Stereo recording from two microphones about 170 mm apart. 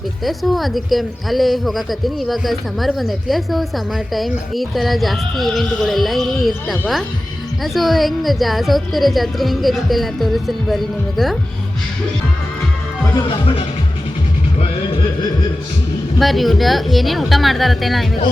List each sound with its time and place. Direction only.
0.3 s a man's voice: centre (ahead or behind)
13.2 s speech: 30° left (ahead or behind)
16.1 s a man's voice: centre (ahead or behind)